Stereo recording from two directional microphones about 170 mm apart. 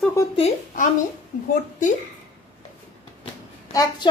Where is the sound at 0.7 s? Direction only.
50° left (ahead or behind).